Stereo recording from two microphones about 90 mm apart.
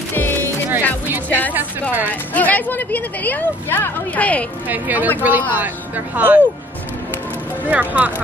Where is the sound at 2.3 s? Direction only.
20° left (ahead or behind).